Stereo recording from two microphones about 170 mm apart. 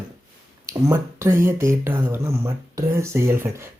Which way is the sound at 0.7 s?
15° right (ahead or behind).